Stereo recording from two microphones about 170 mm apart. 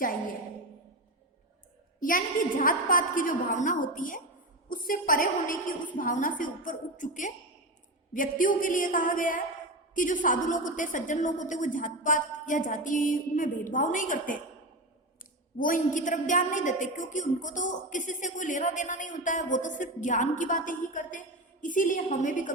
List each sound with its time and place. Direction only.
2.0 s a woman's voice: 55° left (ahead or behind)
15.5 s a woman's voice: 50° left (ahead or behind)